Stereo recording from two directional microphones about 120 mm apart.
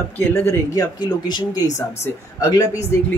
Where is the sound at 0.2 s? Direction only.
20° left (ahead or behind); by 1.4 s 40° left (ahead or behind).